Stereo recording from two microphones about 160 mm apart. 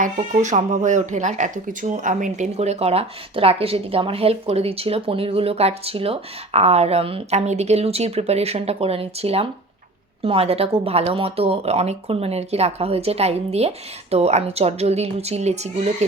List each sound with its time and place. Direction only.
0.0 s speech: 50° right (ahead or behind)